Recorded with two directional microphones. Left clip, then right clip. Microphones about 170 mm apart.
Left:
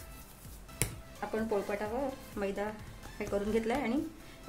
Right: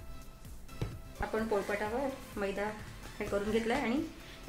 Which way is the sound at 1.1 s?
15° left (ahead or behind).